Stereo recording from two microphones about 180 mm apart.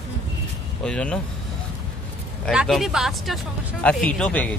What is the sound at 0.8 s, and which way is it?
Speech, 5° left (ahead or behind).